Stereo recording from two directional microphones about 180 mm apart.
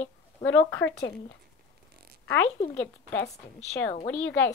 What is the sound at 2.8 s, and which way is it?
Speech, 10° left (ahead or behind).